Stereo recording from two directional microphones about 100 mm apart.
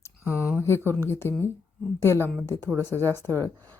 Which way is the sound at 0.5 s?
25° left (ahead or behind).